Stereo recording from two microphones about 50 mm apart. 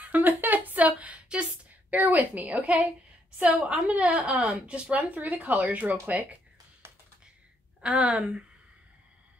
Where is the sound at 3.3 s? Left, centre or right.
Right.